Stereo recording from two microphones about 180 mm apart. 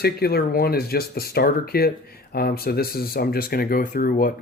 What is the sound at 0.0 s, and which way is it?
Speech, 60° left (ahead or behind).